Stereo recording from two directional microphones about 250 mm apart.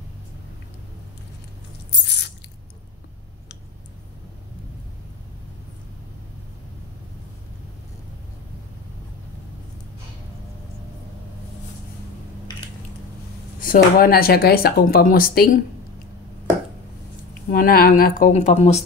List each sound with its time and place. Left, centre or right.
1.9 s a sound: left
13.6 s speech: left
17.5 s speech: left